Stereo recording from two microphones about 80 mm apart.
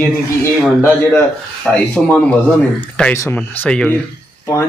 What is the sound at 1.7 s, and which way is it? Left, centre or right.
Speech, centre.